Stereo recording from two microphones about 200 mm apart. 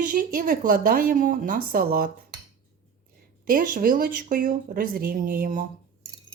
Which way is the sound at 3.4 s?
45° right (ahead or behind).